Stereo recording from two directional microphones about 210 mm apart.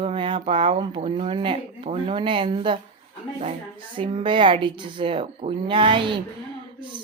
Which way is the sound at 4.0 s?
25° right (ahead or behind).